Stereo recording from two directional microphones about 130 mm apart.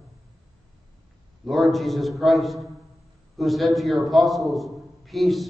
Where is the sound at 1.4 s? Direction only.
Centre (ahead or behind).